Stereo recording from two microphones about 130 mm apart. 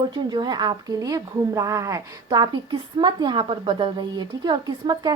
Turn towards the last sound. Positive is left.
turn(degrees=-35)  # may be behind; listen again after turning